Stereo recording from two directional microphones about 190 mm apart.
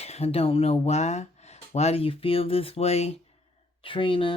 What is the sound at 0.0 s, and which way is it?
Speech, 35° left (ahead or behind).